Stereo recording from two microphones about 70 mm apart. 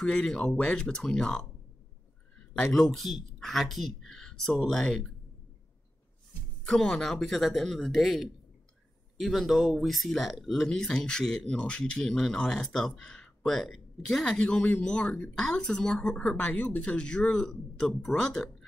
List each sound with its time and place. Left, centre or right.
0.0 s a woman's voice: centre
2.6 s speech: centre
6.6 s a woman's voice: centre
15.3 s a woman's voice: centre